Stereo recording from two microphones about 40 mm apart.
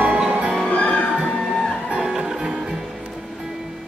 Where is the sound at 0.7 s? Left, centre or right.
Left.